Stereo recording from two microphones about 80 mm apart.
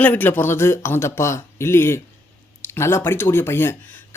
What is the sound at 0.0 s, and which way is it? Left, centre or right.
Speech, left.